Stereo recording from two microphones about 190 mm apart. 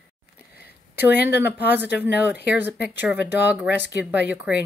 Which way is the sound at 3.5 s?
10° right (ahead or behind).